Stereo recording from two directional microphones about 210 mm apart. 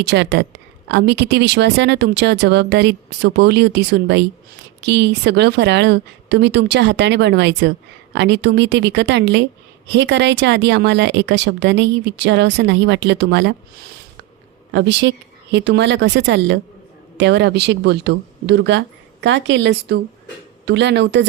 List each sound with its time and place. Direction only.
0.0 s speech: 55° right (ahead or behind)
14.7 s speech: 55° right (ahead or behind)